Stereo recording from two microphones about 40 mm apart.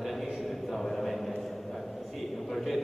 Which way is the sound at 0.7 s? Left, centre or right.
Centre.